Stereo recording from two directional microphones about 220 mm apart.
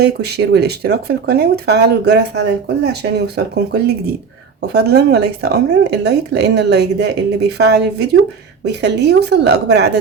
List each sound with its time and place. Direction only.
0.0 s speech: 50° right (ahead or behind)